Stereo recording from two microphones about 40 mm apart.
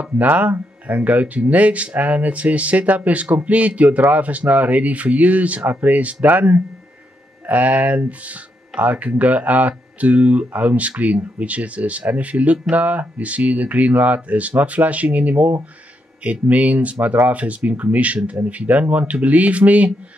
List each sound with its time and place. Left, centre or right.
0.0 s speech: right